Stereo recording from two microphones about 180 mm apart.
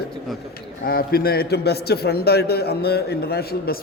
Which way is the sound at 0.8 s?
55° left (ahead or behind).